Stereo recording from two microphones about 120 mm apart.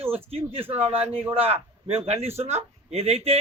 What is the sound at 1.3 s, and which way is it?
Speech, 55° right (ahead or behind).